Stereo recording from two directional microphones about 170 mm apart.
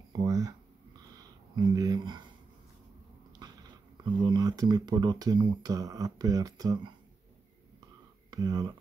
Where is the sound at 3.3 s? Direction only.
25° right (ahead or behind).